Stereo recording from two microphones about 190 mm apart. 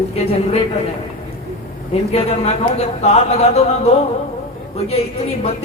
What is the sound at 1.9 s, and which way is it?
A man's voice, 35° left (ahead or behind).